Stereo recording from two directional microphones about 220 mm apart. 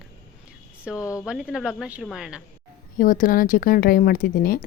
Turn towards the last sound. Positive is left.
turn(degrees=40)  # may be behind; listen again after turning